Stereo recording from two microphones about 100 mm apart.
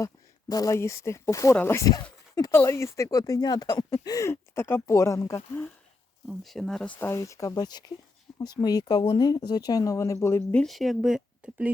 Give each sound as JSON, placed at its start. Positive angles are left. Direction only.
{"t": 0.0, "sound": "speech", "side_deg": 35}
{"t": 6.2, "sound": "speech", "side_deg": 0}
{"t": 7.2, "sound": "speech", "side_deg": 35}
{"t": 10.5, "sound": "speech", "side_deg": 5}
{"t": 11.4, "sound": "speech", "side_deg": -15}